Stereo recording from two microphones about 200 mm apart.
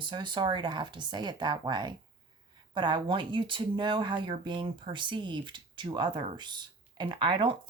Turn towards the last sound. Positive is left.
turn(degrees=-25)  # may be behind; listen again after turning